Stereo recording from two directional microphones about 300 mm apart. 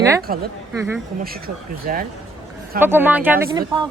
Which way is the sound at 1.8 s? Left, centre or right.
Right.